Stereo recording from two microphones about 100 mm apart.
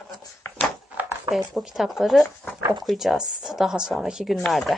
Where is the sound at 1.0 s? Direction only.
15° right (ahead or behind).